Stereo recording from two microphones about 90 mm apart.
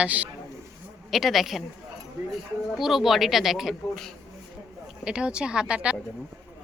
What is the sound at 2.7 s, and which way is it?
A woman's voice, centre (ahead or behind).